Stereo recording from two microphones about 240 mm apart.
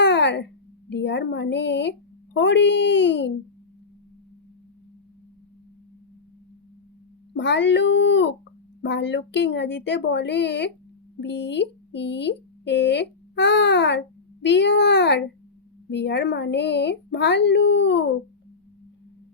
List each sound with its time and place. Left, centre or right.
0.0 s a sound: left
0.9 s speech: left
7.3 s speech: left